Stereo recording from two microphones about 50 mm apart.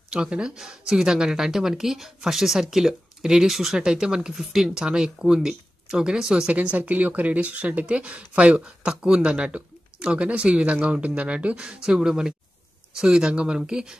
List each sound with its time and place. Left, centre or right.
0.1 s speech: centre
6.5 s speech: right